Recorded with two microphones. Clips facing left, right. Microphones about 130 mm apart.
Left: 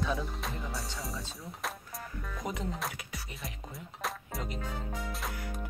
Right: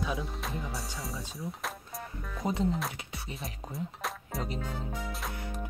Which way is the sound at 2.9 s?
25° right (ahead or behind).